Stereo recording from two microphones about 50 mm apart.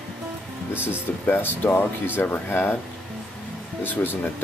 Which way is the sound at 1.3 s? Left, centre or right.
Left.